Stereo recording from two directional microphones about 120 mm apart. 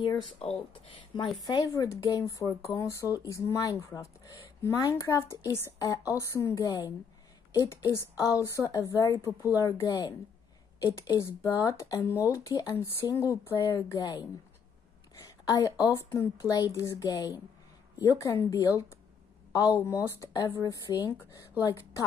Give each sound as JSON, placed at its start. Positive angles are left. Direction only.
{"t": 0.4, "sound": "speech", "side_deg": 50}
{"t": 1.4, "sound": "speech", "side_deg": 30}
{"t": 12.7, "sound": "a woman's voice", "side_deg": 20}